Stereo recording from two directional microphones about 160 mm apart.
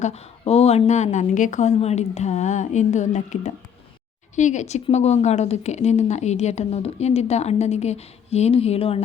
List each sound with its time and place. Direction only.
0.0 s speech: 40° left (ahead or behind)